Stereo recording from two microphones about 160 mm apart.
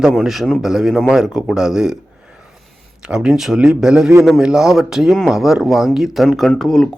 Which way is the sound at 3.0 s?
5° right (ahead or behind).